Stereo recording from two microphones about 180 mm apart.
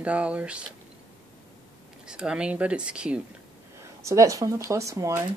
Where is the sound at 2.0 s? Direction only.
5° right (ahead or behind).